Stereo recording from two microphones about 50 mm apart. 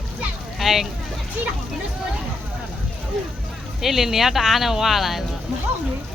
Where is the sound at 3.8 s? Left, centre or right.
Centre.